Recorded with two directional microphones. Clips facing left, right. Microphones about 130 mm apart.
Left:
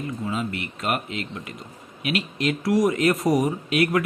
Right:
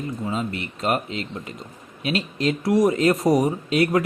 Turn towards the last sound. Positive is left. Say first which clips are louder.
# right 2 dB
turn(degrees=-30)  # may be behind; listen again after turning